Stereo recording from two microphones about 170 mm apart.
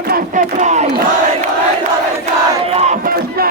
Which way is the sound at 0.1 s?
45° right (ahead or behind).